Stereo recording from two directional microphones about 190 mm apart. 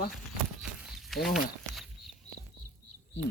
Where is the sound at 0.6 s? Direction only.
Centre (ahead or behind).